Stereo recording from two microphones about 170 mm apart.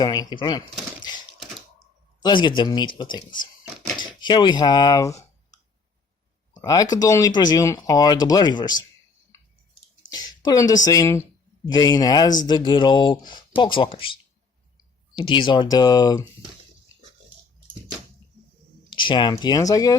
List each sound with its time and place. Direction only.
0.0 s speech: 20° left (ahead or behind)
2.2 s speech: 25° left (ahead or behind)
6.5 s a sound: 20° left (ahead or behind)
6.9 s speech: 20° left (ahead or behind)
10.1 s a sound: 25° left (ahead or behind)
10.8 s speech: 20° left (ahead or behind)
18.9 s speech: 30° left (ahead or behind)